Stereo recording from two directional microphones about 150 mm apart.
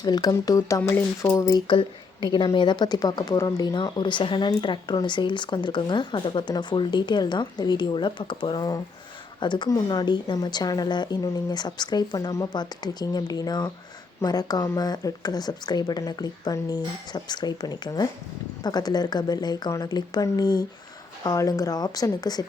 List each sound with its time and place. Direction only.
0.0 s speech: 25° left (ahead or behind)